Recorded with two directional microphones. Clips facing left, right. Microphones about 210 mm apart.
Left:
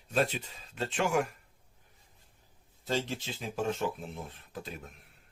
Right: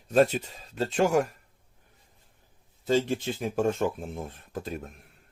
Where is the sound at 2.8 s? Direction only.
55° right (ahead or behind).